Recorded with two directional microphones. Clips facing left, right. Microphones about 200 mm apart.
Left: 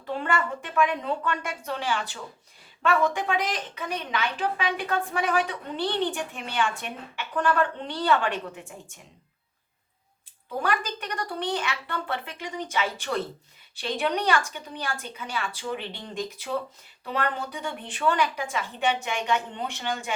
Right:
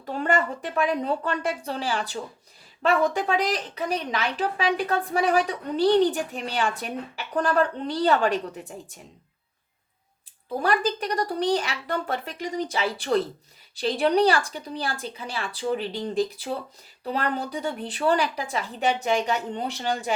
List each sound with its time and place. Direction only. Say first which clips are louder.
0.0 s a woman's voice: right 3 dB; 40° right (ahead or behind)
10.6 s a woman's voice: right 4 dB; 35° right (ahead or behind)